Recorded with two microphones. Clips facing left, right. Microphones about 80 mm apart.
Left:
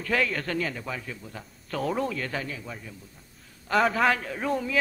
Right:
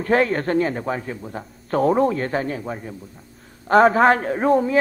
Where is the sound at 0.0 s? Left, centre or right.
Right.